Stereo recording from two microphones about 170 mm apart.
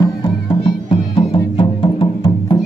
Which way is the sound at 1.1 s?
30° left (ahead or behind).